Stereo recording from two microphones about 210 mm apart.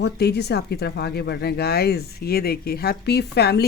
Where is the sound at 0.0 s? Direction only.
50° left (ahead or behind).